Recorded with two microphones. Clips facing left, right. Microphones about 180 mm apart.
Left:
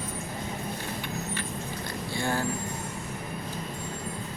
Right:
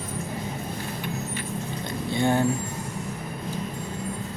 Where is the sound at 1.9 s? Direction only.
20° right (ahead or behind).